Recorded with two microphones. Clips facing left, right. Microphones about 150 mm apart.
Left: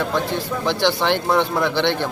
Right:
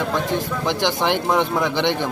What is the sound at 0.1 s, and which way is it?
Speech, 15° right (ahead or behind).